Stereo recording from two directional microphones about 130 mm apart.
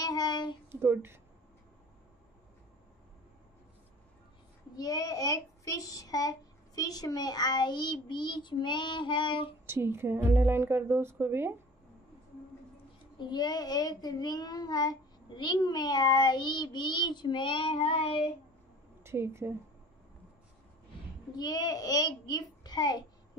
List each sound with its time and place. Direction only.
0.0 s a sound: 30° left (ahead or behind)
0.7 s a woman's voice: 20° right (ahead or behind)
4.7 s a child's voice: 30° left (ahead or behind)
9.7 s a woman's voice: 20° right (ahead or behind)
13.2 s a child's voice: 35° left (ahead or behind)
19.0 s speech: 20° right (ahead or behind)
21.4 s a child's voice: 30° left (ahead or behind)